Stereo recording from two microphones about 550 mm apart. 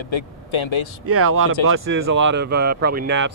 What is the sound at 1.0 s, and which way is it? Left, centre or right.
Speech, right.